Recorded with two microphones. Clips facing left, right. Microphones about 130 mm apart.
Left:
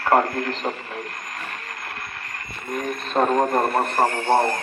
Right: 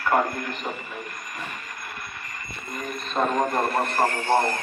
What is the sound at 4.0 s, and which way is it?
Speech, 15° left (ahead or behind).